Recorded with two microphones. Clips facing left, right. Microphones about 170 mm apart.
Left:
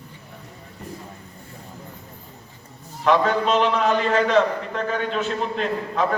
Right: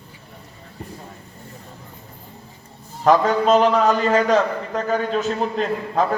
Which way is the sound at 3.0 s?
40° right (ahead or behind).